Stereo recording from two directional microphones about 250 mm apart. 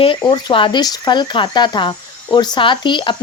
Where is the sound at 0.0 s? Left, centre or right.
Centre.